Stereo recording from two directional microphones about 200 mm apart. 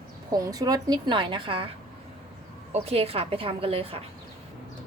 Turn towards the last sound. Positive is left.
turn(degrees=-30)  # may be behind; listen again after turning